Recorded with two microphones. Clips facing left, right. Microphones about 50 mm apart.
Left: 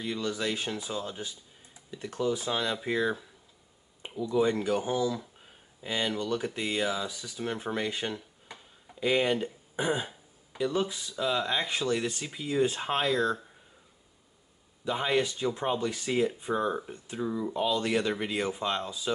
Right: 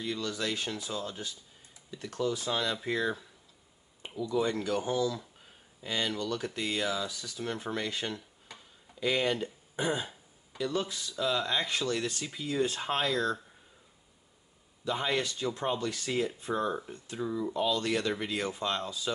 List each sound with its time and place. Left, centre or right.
0.0 s speech: centre
14.9 s speech: centre